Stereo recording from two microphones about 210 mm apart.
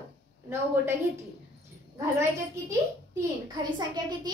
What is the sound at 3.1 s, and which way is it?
A child's voice, 20° right (ahead or behind).